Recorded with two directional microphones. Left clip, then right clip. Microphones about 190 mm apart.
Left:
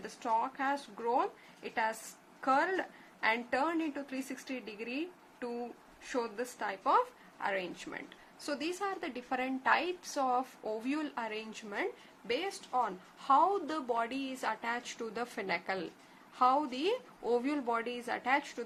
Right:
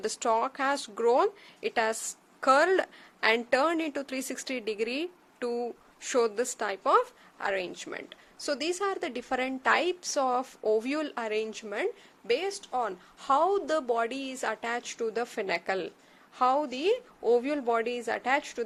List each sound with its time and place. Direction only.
0.0 s a woman's voice: 55° right (ahead or behind); by 18.6 s 35° right (ahead or behind)